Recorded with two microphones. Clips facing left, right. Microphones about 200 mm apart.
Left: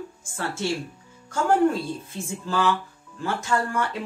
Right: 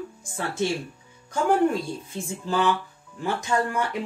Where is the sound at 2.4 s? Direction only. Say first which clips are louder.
Even; 20° right (ahead or behind).